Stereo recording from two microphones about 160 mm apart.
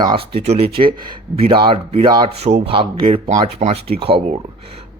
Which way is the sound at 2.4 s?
40° right (ahead or behind).